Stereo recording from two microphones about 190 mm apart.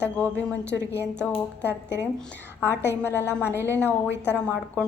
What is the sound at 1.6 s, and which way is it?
Speech, 65° left (ahead or behind).